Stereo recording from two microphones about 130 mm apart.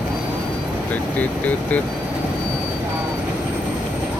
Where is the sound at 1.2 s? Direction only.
10° left (ahead or behind).